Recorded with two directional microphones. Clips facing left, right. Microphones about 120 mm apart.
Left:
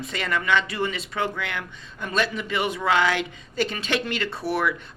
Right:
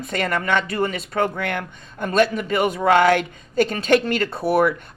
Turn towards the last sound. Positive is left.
turn(degrees=-45)  # may be behind; listen again after turning